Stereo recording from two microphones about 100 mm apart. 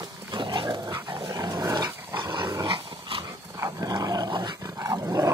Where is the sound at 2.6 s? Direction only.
60° right (ahead or behind).